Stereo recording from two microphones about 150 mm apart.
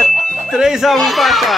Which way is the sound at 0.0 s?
Centre (ahead or behind).